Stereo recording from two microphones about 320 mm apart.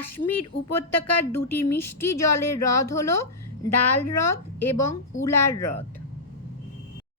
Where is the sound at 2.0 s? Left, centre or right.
Left.